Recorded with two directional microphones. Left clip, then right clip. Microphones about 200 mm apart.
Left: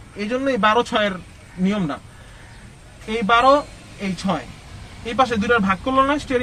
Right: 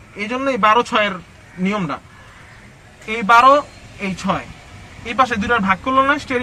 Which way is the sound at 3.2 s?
10° right (ahead or behind).